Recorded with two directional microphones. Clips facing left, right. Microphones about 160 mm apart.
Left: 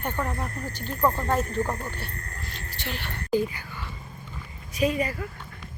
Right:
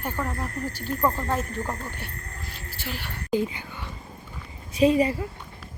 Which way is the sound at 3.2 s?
20° right (ahead or behind).